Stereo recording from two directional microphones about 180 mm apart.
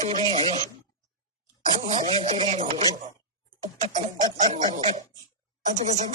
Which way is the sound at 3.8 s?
45° right (ahead or behind).